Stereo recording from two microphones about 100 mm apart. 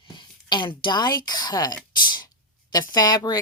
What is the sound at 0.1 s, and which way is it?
Speech, 50° left (ahead or behind).